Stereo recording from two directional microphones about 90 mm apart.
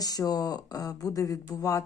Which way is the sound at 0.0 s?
45° left (ahead or behind).